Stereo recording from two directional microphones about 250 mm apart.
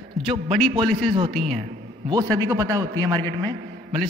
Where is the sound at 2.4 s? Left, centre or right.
Centre.